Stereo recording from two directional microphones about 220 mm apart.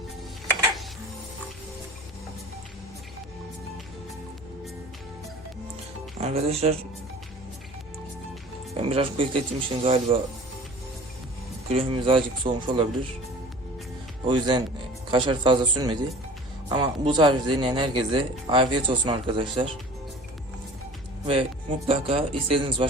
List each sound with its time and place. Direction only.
6.1 s speech: 30° right (ahead or behind)
8.7 s speech: 25° right (ahead or behind)
11.7 s speech: 25° right (ahead or behind)
14.3 s speech: 20° right (ahead or behind)
21.8 s speech: 25° right (ahead or behind)